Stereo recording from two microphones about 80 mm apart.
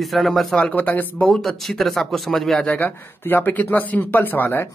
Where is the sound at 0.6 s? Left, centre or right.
Left.